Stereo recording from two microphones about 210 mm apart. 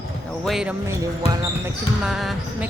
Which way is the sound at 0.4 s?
Centre (ahead or behind).